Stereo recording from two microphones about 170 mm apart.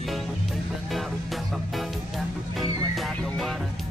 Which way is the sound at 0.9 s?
Centre (ahead or behind).